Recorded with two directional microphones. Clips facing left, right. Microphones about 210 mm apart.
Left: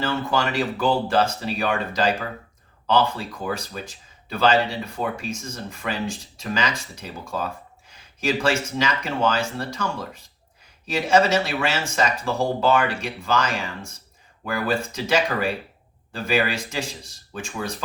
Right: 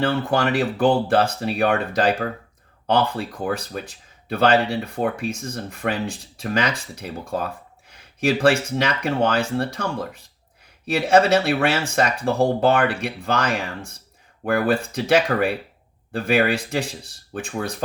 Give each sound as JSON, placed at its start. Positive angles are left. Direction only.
{"t": 0.0, "sound": "speech", "side_deg": -60}